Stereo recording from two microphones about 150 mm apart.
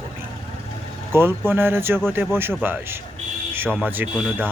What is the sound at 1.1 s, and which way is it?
Speech, 15° right (ahead or behind).